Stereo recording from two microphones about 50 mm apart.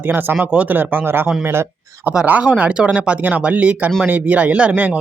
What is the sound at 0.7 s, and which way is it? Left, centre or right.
Speech, right.